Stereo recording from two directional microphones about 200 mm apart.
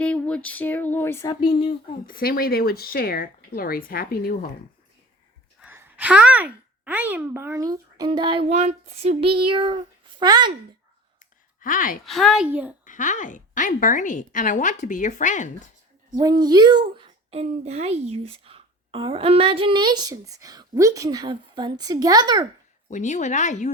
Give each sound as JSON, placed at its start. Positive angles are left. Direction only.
{"t": 0.0, "sound": "a sound", "side_deg": 5}
{"t": 2.0, "sound": "speech", "side_deg": 45}
{"t": 5.5, "sound": "a child's voice", "side_deg": -10}
{"t": 11.6, "sound": "speech", "side_deg": 45}
{"t": 12.0, "sound": "a woman's voice", "side_deg": 0}
{"t": 12.8, "sound": "a woman's voice", "side_deg": 40}
{"t": 16.4, "sound": "a child's voice", "side_deg": -20}
{"t": 22.9, "sound": "a woman's voice", "side_deg": 35}